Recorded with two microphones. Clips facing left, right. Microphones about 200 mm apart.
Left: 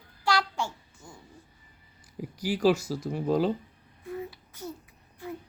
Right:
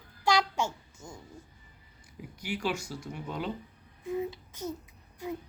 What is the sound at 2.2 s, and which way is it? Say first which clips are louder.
Speech: left 8 dB; 35° left (ahead or behind).